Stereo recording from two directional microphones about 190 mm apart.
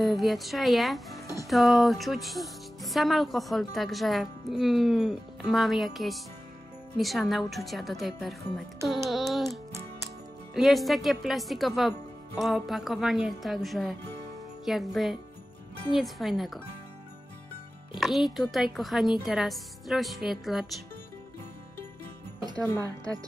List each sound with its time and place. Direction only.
0.0 s speech: centre (ahead or behind)
17.9 s speech: centre (ahead or behind)
22.8 s speech: 15° right (ahead or behind)